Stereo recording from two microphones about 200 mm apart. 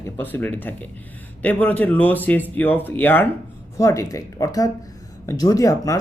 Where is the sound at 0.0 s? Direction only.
10° left (ahead or behind).